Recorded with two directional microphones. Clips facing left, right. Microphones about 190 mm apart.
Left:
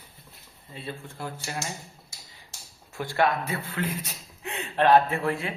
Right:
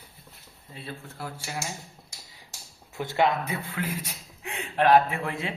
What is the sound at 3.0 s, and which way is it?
A man's voice, 20° right (ahead or behind).